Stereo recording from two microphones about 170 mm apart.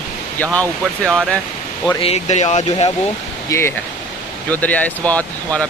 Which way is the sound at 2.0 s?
40° left (ahead or behind).